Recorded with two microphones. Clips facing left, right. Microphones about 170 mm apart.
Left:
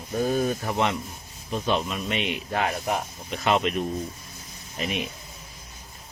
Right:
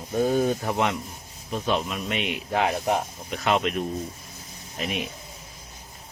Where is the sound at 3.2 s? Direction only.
Centre (ahead or behind).